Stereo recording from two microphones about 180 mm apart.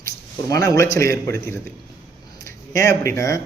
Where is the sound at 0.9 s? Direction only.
15° left (ahead or behind).